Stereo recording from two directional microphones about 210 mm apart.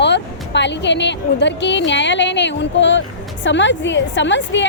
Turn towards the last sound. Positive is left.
turn(degrees=60)  # may be behind; listen again after turning